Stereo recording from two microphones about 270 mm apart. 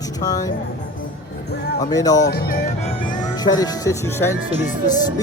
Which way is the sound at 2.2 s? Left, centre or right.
Left.